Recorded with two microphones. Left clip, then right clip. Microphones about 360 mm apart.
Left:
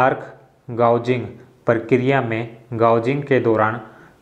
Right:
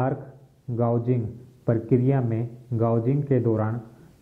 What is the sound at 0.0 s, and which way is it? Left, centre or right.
Speech, centre.